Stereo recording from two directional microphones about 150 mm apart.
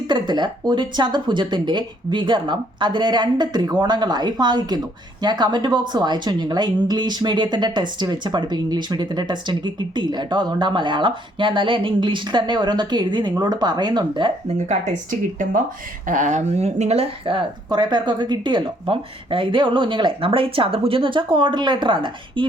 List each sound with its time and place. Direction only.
0.1 s speech: 30° right (ahead or behind)
14.4 s a woman's voice: 55° right (ahead or behind); by 22.4 s 35° right (ahead or behind)